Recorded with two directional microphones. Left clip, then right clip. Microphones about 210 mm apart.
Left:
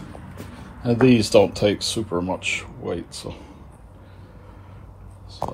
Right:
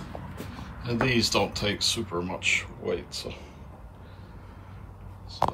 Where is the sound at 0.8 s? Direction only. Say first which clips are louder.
Left 8 dB; 10° left (ahead or behind).